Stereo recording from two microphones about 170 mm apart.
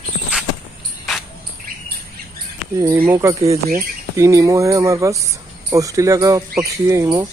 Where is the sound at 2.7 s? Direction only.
15° right (ahead or behind).